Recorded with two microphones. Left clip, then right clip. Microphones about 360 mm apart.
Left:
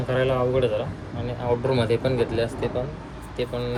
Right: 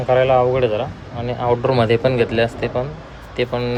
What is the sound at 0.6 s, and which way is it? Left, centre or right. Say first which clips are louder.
Speech: right 5 dB; right.